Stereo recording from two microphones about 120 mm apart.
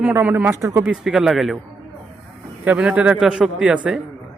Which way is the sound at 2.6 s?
10° right (ahead or behind).